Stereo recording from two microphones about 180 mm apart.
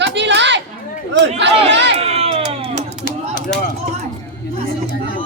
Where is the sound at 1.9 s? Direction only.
35° right (ahead or behind).